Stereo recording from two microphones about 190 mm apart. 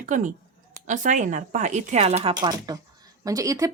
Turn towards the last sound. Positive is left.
turn(degrees=-15)  # may be behind; listen again after turning